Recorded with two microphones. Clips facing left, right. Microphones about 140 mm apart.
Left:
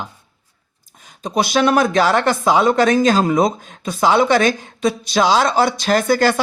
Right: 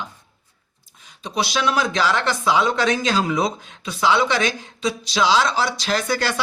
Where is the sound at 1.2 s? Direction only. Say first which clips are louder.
Left 6 dB; 50° left (ahead or behind).